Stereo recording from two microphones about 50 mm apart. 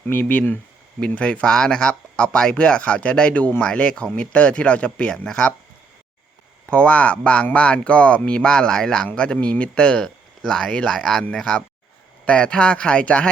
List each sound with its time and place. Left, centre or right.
0.1 s speech: left
0.9 s speech: left
6.7 s speech: left
11.0 s speech: centre
12.2 s speech: left